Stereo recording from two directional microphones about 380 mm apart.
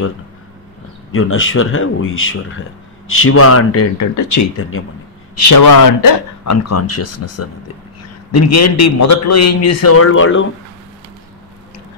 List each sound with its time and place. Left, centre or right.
1.1 s a man's voice: left
5.5 s a man's voice: left